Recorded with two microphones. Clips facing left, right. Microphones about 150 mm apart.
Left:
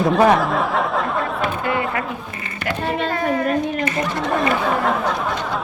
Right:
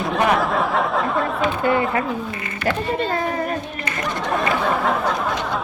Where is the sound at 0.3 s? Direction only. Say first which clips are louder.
Even; centre (ahead or behind).